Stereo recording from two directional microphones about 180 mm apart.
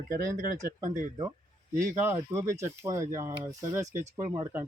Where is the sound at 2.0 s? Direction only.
15° right (ahead or behind).